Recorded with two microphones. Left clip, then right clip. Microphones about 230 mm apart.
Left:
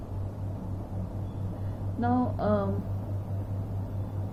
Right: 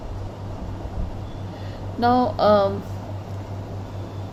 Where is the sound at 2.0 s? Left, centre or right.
Right.